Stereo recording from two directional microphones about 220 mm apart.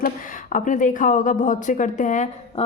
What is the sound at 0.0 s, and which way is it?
A woman's voice, 35° left (ahead or behind).